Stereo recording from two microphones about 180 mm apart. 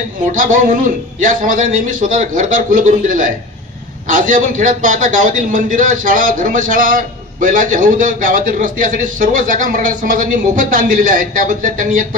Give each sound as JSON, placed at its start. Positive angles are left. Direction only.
{"t": 0.3, "sound": "a man's voice", "side_deg": -45}